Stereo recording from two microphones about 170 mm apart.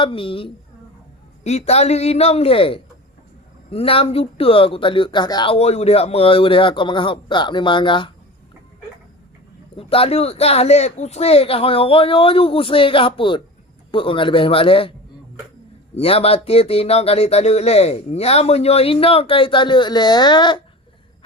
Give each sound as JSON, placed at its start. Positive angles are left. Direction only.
{"t": 0.0, "sound": "speech", "side_deg": 30}
{"t": 9.7, "sound": "speech", "side_deg": 35}
{"t": 16.0, "sound": "speech", "side_deg": 35}